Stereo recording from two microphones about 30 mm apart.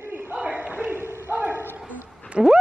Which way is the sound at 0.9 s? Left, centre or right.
Right.